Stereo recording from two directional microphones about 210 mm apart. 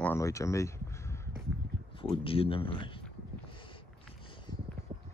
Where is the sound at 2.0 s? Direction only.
25° left (ahead or behind).